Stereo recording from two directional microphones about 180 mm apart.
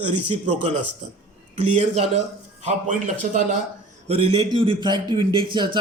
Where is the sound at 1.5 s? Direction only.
35° right (ahead or behind).